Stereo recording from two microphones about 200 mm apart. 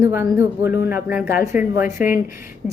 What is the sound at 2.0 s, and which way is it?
Speech, 40° left (ahead or behind).